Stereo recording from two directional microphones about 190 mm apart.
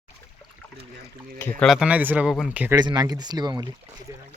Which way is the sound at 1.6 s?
Centre (ahead or behind).